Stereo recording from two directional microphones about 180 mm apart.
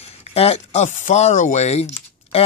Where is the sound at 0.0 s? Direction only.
35° left (ahead or behind).